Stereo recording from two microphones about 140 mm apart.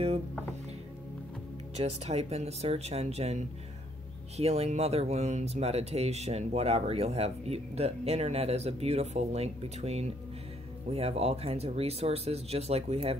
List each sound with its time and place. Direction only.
1.8 s speech: 50° right (ahead or behind)